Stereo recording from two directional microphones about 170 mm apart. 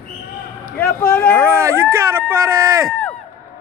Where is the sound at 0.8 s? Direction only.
15° left (ahead or behind).